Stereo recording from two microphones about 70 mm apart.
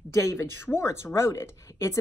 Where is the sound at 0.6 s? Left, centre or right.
Left.